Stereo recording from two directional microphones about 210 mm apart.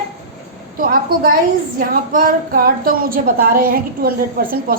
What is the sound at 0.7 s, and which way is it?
A woman's voice, 40° right (ahead or behind).